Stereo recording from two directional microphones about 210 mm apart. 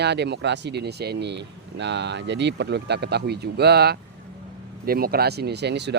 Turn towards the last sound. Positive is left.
turn(degrees=-55)  # may be behind; listen again after turning